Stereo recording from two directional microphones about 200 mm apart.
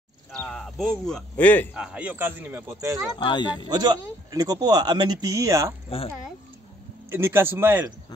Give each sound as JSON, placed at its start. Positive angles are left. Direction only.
{"t": 0.4, "sound": "speech", "side_deg": 5}
{"t": 1.8, "sound": "speech", "side_deg": -5}
{"t": 3.2, "sound": "speech", "side_deg": 25}
{"t": 3.6, "sound": "speech", "side_deg": -20}
{"t": 5.9, "sound": "speech", "side_deg": 30}
{"t": 7.1, "sound": "speech", "side_deg": -10}